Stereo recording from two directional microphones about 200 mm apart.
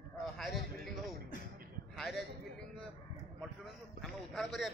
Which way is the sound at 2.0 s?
Centre (ahead or behind).